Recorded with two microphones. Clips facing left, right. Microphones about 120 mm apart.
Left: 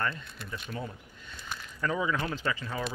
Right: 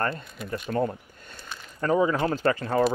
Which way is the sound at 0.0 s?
45° right (ahead or behind).